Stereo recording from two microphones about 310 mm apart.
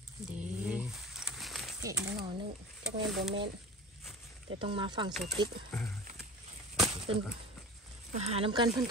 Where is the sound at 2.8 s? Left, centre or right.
Centre.